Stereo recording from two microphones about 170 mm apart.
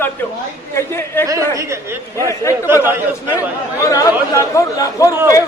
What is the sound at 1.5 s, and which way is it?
Speech, 15° right (ahead or behind).